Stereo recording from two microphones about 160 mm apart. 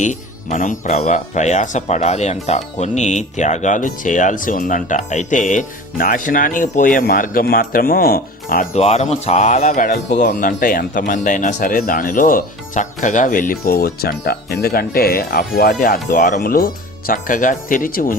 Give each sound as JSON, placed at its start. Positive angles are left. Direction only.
{"t": 0.0, "sound": "speech", "side_deg": 50}
{"t": 8.7, "sound": "speech", "side_deg": 45}